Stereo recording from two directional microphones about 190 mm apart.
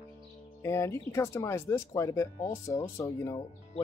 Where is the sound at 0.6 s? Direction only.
15° left (ahead or behind).